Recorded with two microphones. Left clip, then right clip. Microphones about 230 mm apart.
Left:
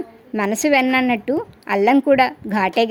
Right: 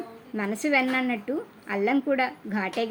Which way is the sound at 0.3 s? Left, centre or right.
Left.